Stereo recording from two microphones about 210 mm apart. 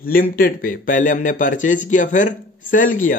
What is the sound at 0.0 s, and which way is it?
Speech, 45° left (ahead or behind).